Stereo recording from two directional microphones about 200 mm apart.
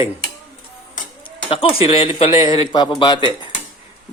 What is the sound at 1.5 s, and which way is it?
A man's voice, 30° left (ahead or behind).